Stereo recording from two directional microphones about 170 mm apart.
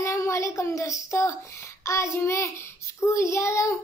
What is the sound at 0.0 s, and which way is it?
Speech, 15° left (ahead or behind).